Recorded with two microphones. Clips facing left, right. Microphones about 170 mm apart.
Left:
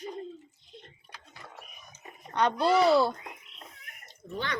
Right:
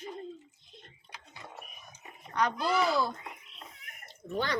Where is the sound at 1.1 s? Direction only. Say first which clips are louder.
Right 3 dB; 20° right (ahead or behind).